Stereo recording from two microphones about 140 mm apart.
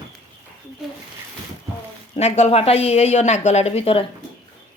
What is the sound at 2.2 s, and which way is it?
A woman's voice, 50° left (ahead or behind).